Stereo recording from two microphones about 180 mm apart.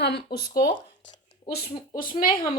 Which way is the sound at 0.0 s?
65° left (ahead or behind).